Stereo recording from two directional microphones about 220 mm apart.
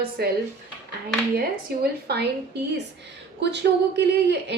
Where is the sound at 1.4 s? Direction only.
45° right (ahead or behind).